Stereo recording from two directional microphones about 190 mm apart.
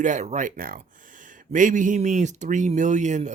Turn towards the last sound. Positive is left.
turn(degrees=-40)  # may be behind; listen again after turning